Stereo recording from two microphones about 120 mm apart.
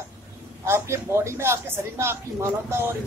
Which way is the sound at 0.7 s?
20° right (ahead or behind).